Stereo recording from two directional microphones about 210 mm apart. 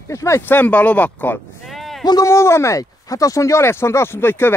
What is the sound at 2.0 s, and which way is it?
Speech, 15° left (ahead or behind).